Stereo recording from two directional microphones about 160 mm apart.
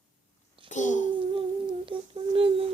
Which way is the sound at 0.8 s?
50° left (ahead or behind).